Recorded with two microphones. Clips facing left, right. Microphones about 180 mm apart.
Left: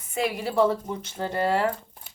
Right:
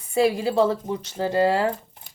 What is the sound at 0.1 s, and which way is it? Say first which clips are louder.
A woman's voice: right 7 dB; 30° right (ahead or behind).